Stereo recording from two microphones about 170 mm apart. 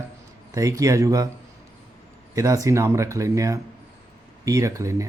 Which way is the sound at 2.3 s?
20° right (ahead or behind).